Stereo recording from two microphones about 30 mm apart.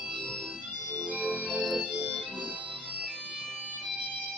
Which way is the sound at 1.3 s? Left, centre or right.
Right.